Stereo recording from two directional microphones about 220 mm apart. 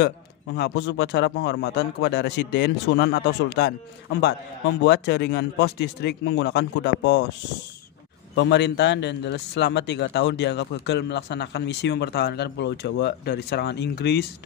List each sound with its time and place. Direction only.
0.6 s a man's voice: 50° left (ahead or behind)
4.8 s a man's voice: 50° left (ahead or behind)
8.4 s a man's voice: 50° left (ahead or behind)